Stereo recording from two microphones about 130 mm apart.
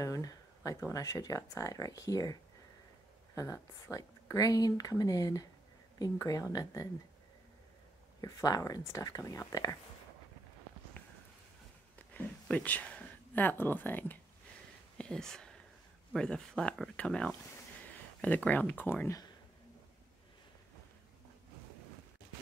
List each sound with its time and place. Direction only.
0.0 s speech: 30° left (ahead or behind)
3.3 s speech: 25° left (ahead or behind)
8.2 s speech: 30° left (ahead or behind)
12.1 s speech: 10° left (ahead or behind)
15.0 s a sound: 5° left (ahead or behind)
16.1 s speech: 5° left (ahead or behind)